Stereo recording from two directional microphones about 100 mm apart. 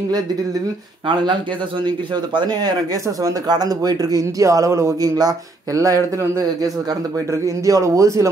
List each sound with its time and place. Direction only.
1.9 s speech: 50° right (ahead or behind); by 8.3 s 30° right (ahead or behind)